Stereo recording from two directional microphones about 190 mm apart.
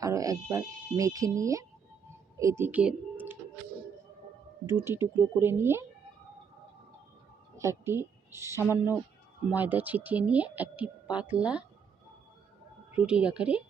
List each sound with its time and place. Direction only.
0.0 s speech: 15° right (ahead or behind)
4.6 s speech: 10° right (ahead or behind)
7.5 s speech: 15° right (ahead or behind)
12.9 s speech: 5° right (ahead or behind)